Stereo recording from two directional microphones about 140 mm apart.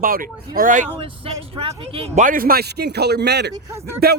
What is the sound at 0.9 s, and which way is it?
Speech, 40° right (ahead or behind).